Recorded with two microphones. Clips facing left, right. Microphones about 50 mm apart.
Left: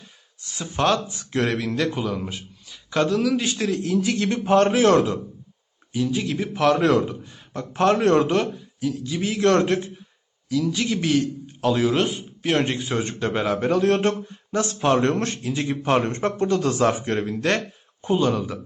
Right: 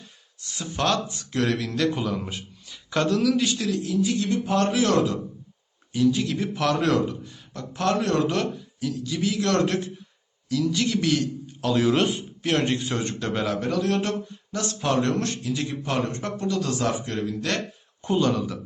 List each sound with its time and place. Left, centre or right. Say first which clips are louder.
0.5 s speech: left 3 dB; centre
1.9 s a man's voice: left 1 dB; centre; by 3.8 s left
3.8 s a man's voice: left 1 dB; left
4.4 s a man's voice: left 7 dB; left
5.9 s speech: right 2 dB; centre
7.3 s a man's voice: left 4 dB; left
8.3 s speech: left 4 dB; centre
9.1 s speech: left 4 dB; left
11.8 s speech: even; centre; by 13.7 s left
13.7 s a man's voice: left 8 dB; left
14.5 s a man's voice: left 4 dB; left
18.0 s speech: left 2 dB; centre